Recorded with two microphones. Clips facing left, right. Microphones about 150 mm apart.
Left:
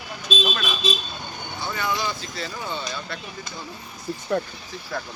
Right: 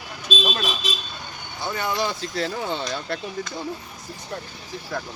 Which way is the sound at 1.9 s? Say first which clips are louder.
Right 4 dB; 75° right (ahead or behind).